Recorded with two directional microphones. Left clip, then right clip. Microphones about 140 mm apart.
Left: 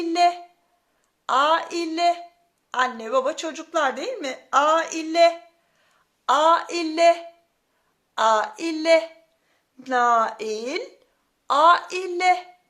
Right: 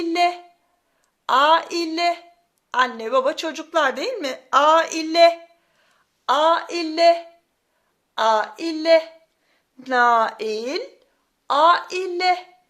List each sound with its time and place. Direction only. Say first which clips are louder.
0.0 s a sound: even; 35° right (ahead or behind)
1.3 s a woman's voice: right 4 dB; 40° right (ahead or behind)
6.2 s speech: even; 15° right (ahead or behind)
9.8 s a woman's voice: right 2 dB; 25° right (ahead or behind)